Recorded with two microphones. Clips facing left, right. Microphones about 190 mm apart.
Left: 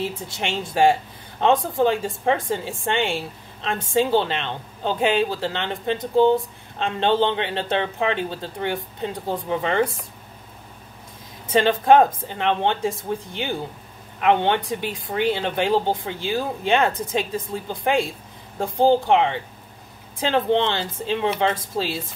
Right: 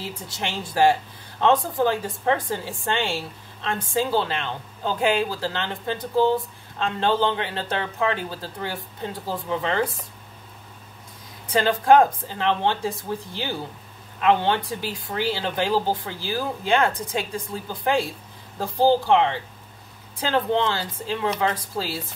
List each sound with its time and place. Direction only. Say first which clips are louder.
0.0 s speech: left 4 dB; 20° left (ahead or behind)
11.4 s speech: left 2 dB; 25° left (ahead or behind)